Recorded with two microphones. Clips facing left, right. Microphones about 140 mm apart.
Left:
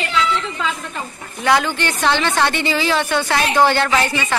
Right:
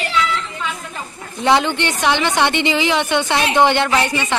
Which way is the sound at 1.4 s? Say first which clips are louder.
Right 2 dB; 25° right (ahead or behind).